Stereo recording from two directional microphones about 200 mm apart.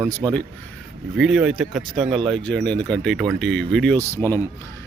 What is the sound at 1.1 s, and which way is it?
Speech, centre (ahead or behind).